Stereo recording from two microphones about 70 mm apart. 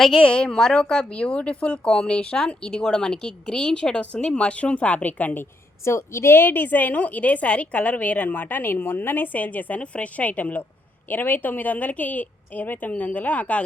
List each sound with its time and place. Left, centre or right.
0.2 s speech: centre
5.8 s a woman's voice: left